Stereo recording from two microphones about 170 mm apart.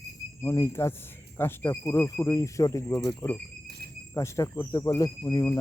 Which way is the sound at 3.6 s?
70° right (ahead or behind).